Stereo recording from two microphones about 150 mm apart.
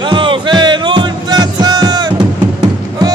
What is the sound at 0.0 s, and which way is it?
Music, 35° right (ahead or behind).